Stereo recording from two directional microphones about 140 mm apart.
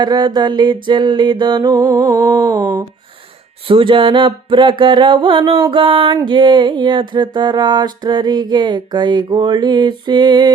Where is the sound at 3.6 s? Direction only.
40° right (ahead or behind).